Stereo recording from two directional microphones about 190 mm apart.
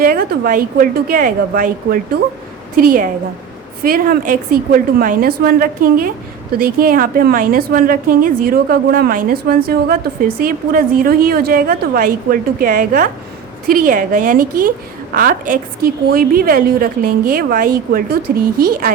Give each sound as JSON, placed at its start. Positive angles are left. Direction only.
{"t": 0.0, "sound": "a woman's voice", "side_deg": -50}